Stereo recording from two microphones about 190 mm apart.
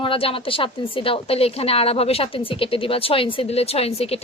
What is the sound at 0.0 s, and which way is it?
A woman's voice, 30° left (ahead or behind).